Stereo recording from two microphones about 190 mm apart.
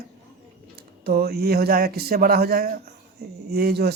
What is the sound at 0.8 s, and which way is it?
Speech, 55° right (ahead or behind).